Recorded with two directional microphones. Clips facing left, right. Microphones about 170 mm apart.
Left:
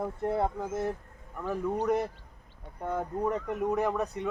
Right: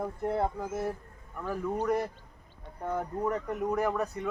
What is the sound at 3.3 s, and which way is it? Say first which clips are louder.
Speech: left 1 dB; 20° left (ahead or behind).